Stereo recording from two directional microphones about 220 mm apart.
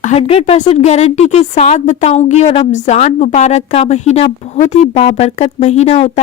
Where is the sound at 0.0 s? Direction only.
30° left (ahead or behind).